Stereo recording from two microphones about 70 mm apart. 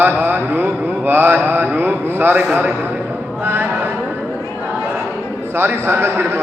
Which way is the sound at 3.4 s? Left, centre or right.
Right.